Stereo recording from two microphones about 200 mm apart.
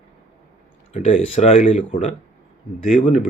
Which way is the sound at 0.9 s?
30° left (ahead or behind).